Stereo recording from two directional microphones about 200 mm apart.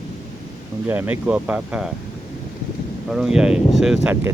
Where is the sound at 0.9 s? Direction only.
10° right (ahead or behind).